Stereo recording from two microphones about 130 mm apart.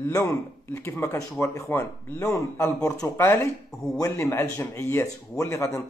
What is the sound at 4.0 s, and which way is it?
Speech, 25° left (ahead or behind).